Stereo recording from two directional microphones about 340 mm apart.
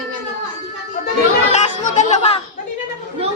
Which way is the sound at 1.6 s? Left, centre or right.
Left.